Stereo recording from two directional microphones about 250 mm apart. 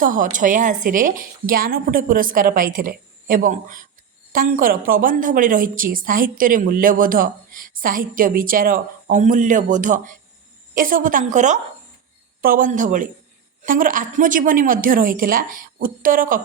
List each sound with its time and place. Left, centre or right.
0.0 s a woman's voice: right